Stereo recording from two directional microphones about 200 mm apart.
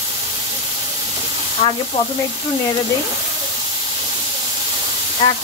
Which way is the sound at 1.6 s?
25° left (ahead or behind).